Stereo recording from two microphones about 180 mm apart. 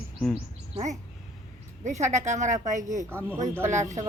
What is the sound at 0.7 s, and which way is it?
Speech, 40° right (ahead or behind).